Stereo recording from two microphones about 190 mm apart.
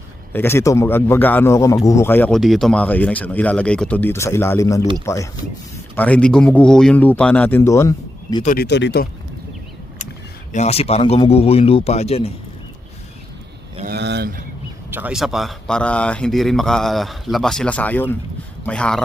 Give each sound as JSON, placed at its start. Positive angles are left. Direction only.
{"t": 0.3, "sound": "speech", "side_deg": 10}
{"t": 8.4, "sound": "speech", "side_deg": 55}
{"t": 10.5, "sound": "speech", "side_deg": 35}
{"t": 13.8, "sound": "a sound", "side_deg": -60}
{"t": 14.8, "sound": "speech", "side_deg": -10}